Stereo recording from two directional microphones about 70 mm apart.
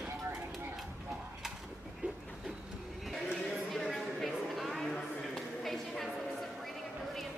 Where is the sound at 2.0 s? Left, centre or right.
Right.